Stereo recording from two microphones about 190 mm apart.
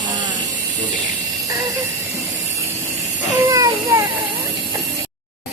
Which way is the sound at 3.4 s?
20° right (ahead or behind).